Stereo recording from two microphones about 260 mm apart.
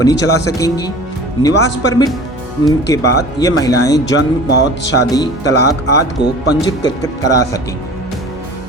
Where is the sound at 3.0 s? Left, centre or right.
Left.